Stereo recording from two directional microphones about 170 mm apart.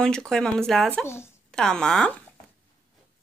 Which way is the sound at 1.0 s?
15° left (ahead or behind).